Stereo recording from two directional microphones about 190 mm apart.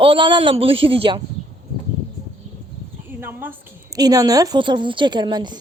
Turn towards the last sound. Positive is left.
turn(degrees=-25)  # may be behind; listen again after turning